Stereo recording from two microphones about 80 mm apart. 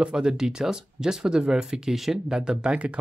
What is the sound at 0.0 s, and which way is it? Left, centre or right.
Speech, centre.